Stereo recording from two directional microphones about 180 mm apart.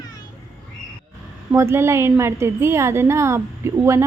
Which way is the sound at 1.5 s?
15° right (ahead or behind).